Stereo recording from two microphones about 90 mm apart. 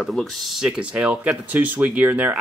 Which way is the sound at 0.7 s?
10° right (ahead or behind).